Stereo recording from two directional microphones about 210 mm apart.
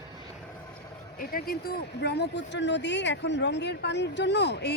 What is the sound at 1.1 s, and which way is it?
Speech, 45° left (ahead or behind).